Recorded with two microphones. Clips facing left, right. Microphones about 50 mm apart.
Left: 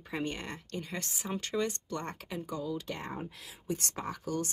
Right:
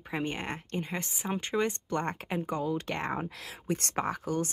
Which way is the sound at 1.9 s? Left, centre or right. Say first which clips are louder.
Right 6 dB; right.